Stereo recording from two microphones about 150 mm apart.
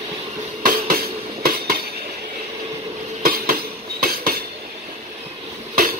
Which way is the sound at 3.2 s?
75° right (ahead or behind).